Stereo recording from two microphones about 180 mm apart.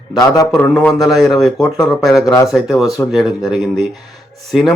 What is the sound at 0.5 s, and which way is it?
Speech, 5° left (ahead or behind).